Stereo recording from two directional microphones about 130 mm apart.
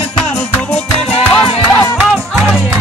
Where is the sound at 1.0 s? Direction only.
50° left (ahead or behind).